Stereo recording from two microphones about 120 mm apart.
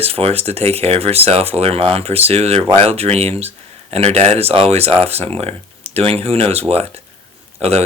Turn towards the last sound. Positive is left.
turn(degrees=-60)  # may be behind; listen again after turning